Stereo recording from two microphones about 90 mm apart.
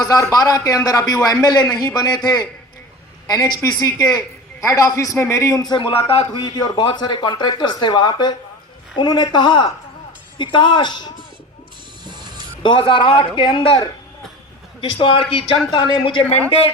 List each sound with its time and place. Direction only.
0.1 s a man's voice: 40° left (ahead or behind)
5.6 s a man's voice: 55° left (ahead or behind)
12.0 s music: 55° right (ahead or behind)
12.6 s a man's voice: 65° left (ahead or behind)
15.3 s speech: 90° left
15.7 s speech: 65° left (ahead or behind)